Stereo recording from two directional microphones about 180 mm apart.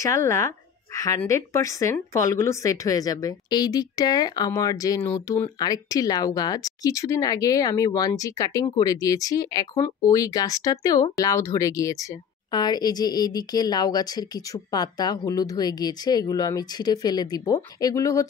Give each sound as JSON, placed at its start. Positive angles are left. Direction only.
{"t": 0.0, "sound": "speech", "side_deg": 15}